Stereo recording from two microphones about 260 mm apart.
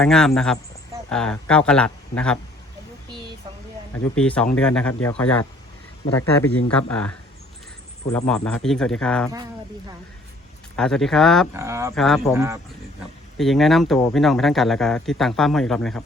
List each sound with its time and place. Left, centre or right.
0.0 s speech: centre
3.1 s a sound: centre
4.1 s speech: centre
8.3 s speech: centre
10.8 s speech: centre
11.5 s speech: centre
11.9 s speech: centre
13.4 s speech: centre